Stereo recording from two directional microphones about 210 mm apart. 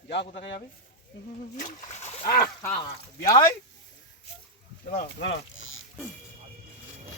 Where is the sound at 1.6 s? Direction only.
35° left (ahead or behind).